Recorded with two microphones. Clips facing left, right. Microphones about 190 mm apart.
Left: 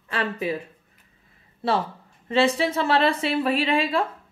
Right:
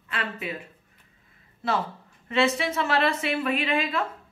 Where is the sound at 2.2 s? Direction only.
30° left (ahead or behind).